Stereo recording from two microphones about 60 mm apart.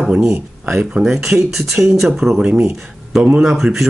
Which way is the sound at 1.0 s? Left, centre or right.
Centre.